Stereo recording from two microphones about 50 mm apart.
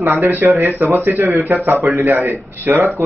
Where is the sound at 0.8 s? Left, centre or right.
Right.